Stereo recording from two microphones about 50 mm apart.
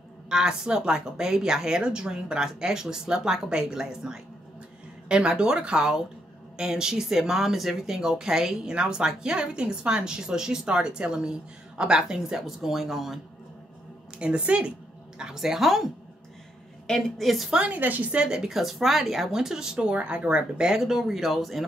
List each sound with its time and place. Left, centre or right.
0.3 s speech: centre
14.1 s a woman's voice: right
15.1 s speech: centre
16.8 s a woman's voice: centre
17.2 s speech: centre
17.6 s a woman's voice: right
18.1 s speech: centre
18.4 s speech: centre
20.8 s speech: centre